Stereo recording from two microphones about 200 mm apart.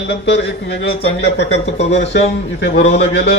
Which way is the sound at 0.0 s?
60° left (ahead or behind).